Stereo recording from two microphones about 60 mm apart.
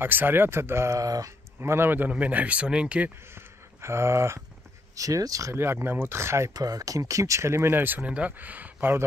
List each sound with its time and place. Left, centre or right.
0.0 s speech: right
0.9 s speech: right
1.6 s speech: right; by 3.1 s centre
3.3 s a sound: right
4.9 s speech: right
5.5 s speech: right
6.5 s speech: right
8.0 s speech: right